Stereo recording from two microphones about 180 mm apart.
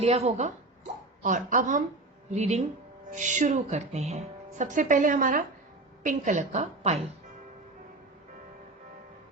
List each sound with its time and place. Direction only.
0.0 s a woman's voice: 35° right (ahead or behind)